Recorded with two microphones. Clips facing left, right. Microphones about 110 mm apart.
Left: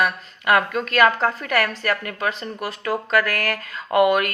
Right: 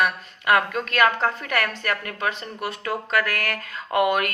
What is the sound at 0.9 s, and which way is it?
Speech, 35° left (ahead or behind).